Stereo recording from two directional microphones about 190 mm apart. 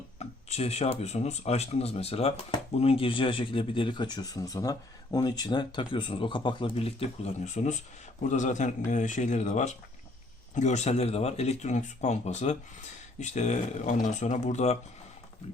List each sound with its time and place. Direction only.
0.2 s speech: 35° left (ahead or behind)